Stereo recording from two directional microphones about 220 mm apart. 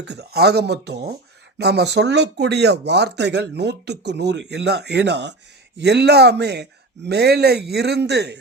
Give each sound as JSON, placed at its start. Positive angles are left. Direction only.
{"t": 0.0, "sound": "speech", "side_deg": -50}